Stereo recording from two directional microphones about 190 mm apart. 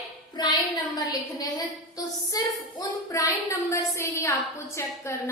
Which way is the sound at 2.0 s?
20° left (ahead or behind).